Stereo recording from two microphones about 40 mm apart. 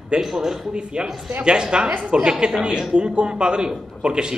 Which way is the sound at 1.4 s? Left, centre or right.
Right.